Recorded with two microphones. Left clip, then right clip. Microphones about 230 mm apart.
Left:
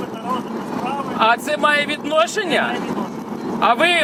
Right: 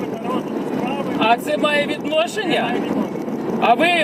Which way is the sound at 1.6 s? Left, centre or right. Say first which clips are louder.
Left 3 dB; left.